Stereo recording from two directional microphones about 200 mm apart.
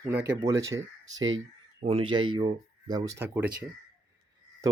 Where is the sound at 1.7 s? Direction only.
25° right (ahead or behind); by 3.5 s 10° right (ahead or behind).